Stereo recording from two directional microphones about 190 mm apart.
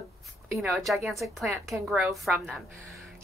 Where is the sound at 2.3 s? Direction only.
Centre (ahead or behind).